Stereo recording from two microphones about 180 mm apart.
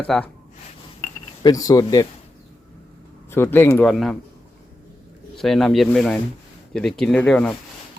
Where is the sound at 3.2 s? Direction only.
10° left (ahead or behind).